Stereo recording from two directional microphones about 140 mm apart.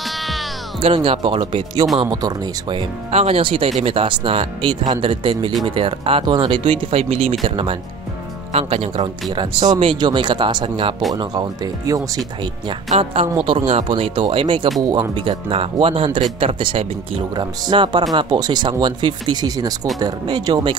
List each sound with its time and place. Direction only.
0.7 s speech: 45° right (ahead or behind)
3.1 s speech: 45° right (ahead or behind); by 12.0 s 30° right (ahead or behind)
13.0 s speech: 40° right (ahead or behind)